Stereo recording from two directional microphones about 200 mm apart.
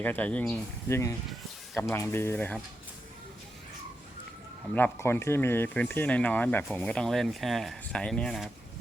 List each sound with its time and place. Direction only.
0.0 s speech: 10° left (ahead or behind)
4.7 s speech: 10° left (ahead or behind)